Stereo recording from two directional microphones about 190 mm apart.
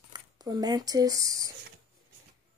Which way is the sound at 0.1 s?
20° right (ahead or behind).